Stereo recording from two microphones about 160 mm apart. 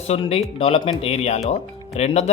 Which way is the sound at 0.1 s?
40° left (ahead or behind).